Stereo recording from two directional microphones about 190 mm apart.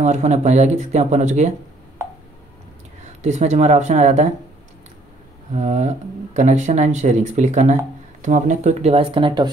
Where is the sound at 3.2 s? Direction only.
35° right (ahead or behind).